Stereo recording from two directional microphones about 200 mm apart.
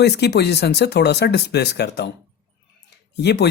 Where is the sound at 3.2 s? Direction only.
60° left (ahead or behind).